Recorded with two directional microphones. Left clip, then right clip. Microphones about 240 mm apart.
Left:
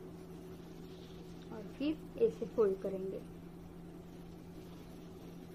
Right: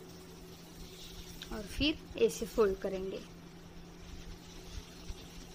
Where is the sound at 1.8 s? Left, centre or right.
Right.